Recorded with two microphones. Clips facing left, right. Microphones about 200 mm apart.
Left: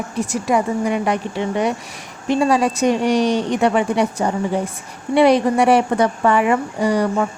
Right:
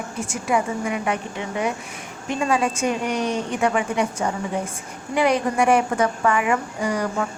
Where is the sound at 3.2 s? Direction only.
80° left.